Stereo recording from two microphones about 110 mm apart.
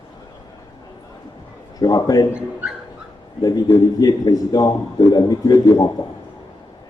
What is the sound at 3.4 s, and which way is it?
A man's voice, 35° left (ahead or behind).